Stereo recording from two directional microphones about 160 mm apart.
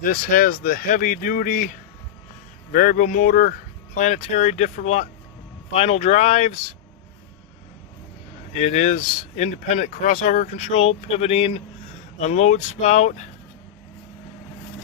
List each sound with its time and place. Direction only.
0.0 s speech: 60° left (ahead or behind)
8.5 s speech: 50° left (ahead or behind)